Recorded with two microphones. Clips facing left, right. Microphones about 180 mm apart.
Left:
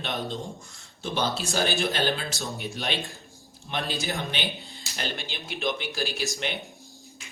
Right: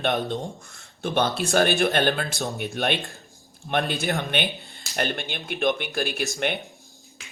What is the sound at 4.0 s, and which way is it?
A man's voice, 60° right (ahead or behind).